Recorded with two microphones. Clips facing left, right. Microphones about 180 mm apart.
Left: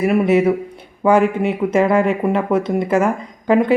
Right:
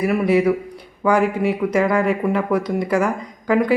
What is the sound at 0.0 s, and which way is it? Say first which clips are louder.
Speech: left 2 dB; 25° left (ahead or behind).